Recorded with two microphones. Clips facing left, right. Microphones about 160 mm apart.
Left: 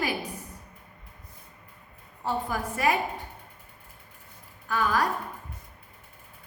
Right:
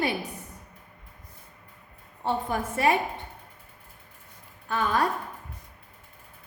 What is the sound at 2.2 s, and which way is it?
Speech, 25° right (ahead or behind).